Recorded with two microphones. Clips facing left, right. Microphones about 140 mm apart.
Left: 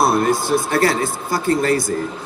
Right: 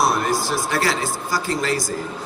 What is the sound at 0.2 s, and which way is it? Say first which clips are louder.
Speech: left 5 dB; 55° left (ahead or behind).